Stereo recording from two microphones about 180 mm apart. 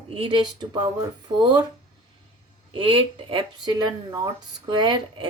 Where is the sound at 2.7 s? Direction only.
30° right (ahead or behind).